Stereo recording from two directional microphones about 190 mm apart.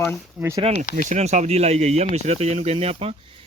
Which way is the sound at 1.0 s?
40° right (ahead or behind).